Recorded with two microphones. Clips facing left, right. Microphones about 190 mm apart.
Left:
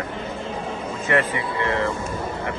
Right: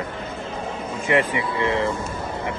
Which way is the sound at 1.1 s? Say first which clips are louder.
Right 1 dB; 15° right (ahead or behind).